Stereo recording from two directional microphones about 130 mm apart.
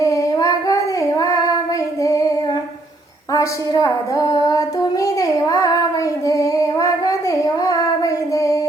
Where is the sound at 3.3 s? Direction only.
25° left (ahead or behind).